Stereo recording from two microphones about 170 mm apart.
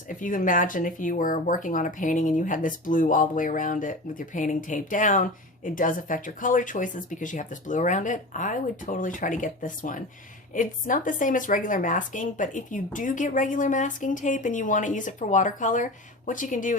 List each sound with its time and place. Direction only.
0.1 s speech: 50° left (ahead or behind)